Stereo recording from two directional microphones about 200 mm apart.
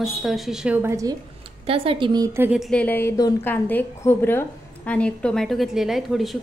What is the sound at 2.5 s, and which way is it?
A woman's voice, centre (ahead or behind).